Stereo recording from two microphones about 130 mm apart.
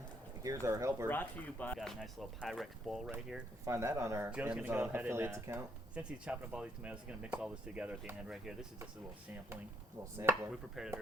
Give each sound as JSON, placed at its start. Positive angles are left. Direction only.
{"t": 0.4, "sound": "speech", "side_deg": -25}
{"t": 1.0, "sound": "speech", "side_deg": 15}
{"t": 3.7, "sound": "speech", "side_deg": -20}
{"t": 4.3, "sound": "speech", "side_deg": -10}
{"t": 5.9, "sound": "speech", "side_deg": -10}
{"t": 10.0, "sound": "speech", "side_deg": -20}
{"t": 10.8, "sound": "speech", "side_deg": 0}